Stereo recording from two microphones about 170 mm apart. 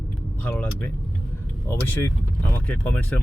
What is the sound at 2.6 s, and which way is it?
Speech, 10° left (ahead or behind).